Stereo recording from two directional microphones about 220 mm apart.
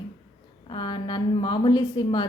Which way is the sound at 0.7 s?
20° left (ahead or behind).